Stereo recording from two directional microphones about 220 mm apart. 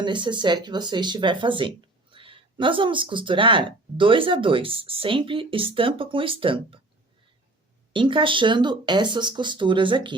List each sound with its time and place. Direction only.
0.0 s speech: 20° right (ahead or behind)
7.9 s speech: 20° right (ahead or behind)